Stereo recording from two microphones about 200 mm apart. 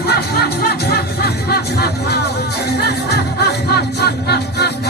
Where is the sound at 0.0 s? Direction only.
50° left (ahead or behind).